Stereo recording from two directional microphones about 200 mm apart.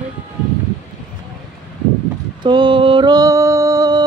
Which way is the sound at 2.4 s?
25° right (ahead or behind).